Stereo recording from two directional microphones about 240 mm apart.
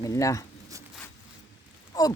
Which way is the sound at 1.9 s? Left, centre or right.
Centre.